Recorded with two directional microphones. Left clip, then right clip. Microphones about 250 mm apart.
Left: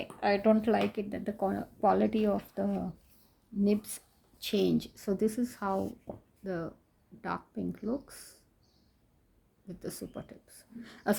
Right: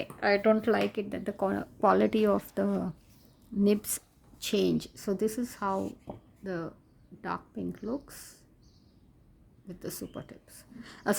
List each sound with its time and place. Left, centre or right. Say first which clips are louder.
0.0 s speech: right 2 dB; right
9.6 s speech: right 1 dB; centre